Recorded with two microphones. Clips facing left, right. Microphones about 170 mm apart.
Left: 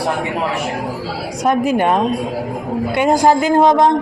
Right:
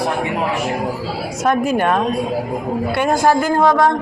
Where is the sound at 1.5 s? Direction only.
15° left (ahead or behind).